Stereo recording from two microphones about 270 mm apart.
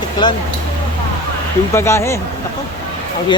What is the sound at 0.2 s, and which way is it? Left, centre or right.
Speech, centre.